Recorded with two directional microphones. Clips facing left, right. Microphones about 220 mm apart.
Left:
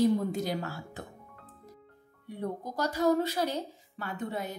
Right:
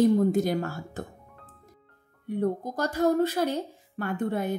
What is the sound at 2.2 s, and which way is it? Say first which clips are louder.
Speech: right 8 dB; 50° right (ahead or behind).